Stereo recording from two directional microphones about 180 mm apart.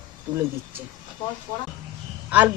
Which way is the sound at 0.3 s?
25° right (ahead or behind).